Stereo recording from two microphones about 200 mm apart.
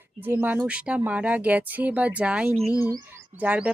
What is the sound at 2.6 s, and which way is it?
Speech, 15° left (ahead or behind).